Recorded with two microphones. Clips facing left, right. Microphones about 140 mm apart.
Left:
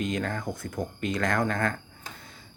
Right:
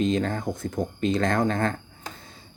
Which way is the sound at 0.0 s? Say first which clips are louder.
Right 5 dB; 25° right (ahead or behind).